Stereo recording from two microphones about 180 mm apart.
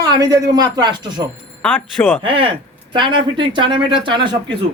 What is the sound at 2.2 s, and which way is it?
Speech, 30° right (ahead or behind).